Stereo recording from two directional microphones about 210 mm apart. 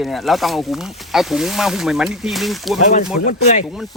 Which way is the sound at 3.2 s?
40° left (ahead or behind).